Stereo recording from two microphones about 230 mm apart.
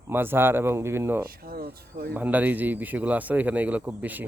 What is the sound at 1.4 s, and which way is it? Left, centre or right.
Speech, right.